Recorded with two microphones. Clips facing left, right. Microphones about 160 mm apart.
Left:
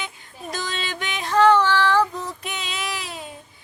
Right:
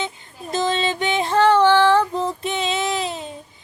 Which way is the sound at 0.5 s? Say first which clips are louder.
Right 10 dB; 25° right (ahead or behind).